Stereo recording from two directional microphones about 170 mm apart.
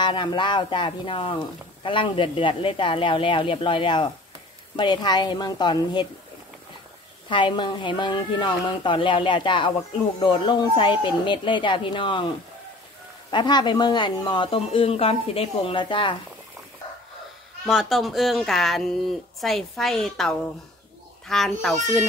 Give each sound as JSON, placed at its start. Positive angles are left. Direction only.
{"t": 0.0, "sound": "speech", "side_deg": 30}
{"t": 7.2, "sound": "speech", "side_deg": 30}
{"t": 13.3, "sound": "speech", "side_deg": 25}
{"t": 17.6, "sound": "speech", "side_deg": 0}